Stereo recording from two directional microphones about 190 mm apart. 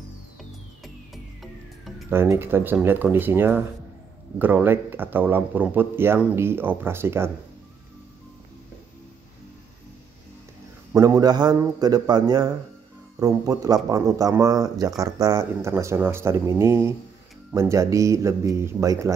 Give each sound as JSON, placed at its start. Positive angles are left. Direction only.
{"t": 1.1, "sound": "music", "side_deg": 0}
{"t": 2.0, "sound": "speech", "side_deg": -10}
{"t": 10.9, "sound": "a man's voice", "side_deg": -15}